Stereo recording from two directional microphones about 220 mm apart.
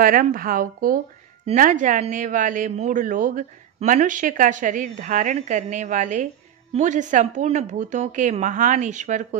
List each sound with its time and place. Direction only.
0.0 s speech: 40° right (ahead or behind)